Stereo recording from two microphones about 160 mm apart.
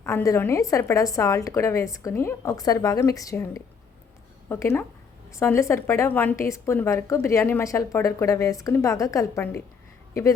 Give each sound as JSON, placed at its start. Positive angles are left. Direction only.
{"t": 0.3, "sound": "a woman's voice", "side_deg": 15}